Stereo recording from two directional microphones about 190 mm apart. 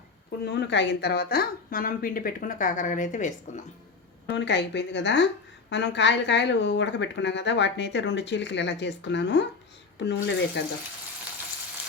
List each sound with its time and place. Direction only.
0.4 s a woman's voice: 65° left (ahead or behind); by 3.6 s 40° left (ahead or behind)
4.3 s a woman's voice: 65° left (ahead or behind)